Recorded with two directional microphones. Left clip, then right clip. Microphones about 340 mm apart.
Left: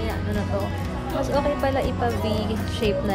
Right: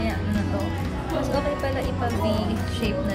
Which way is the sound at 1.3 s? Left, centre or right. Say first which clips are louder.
Left 5 dB; centre.